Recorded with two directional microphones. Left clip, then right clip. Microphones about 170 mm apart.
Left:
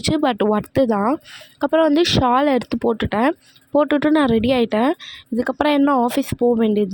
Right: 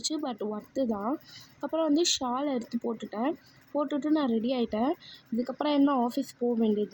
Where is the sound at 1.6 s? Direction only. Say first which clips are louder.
Left 11 dB; 50° left (ahead or behind).